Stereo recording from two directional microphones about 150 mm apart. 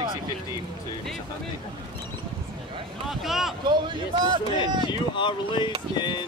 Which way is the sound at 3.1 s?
Centre (ahead or behind).